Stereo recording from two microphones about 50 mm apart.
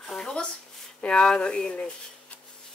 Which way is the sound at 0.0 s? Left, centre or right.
Centre.